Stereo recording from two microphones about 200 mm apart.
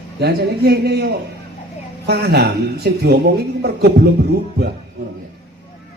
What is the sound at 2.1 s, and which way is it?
A man's voice, 55° right (ahead or behind).